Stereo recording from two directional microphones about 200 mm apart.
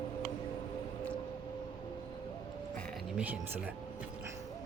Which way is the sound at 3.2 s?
10° right (ahead or behind).